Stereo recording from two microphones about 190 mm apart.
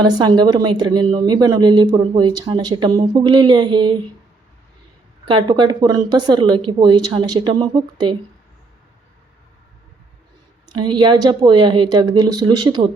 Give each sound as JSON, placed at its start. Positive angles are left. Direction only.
{"t": 0.0, "sound": "a woman's voice", "side_deg": -25}
{"t": 5.2, "sound": "a woman's voice", "side_deg": -25}
{"t": 10.8, "sound": "a woman's voice", "side_deg": -25}